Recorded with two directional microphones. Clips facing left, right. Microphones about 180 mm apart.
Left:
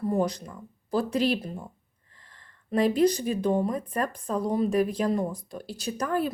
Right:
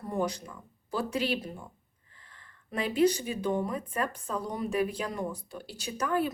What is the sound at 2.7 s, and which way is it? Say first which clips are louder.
Speech: left 4 dB; 35° left (ahead or behind).